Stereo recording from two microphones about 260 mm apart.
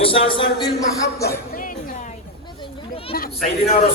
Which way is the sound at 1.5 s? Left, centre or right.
Left.